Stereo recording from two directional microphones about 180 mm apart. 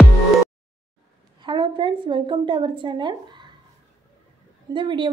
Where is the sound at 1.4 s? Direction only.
25° right (ahead or behind).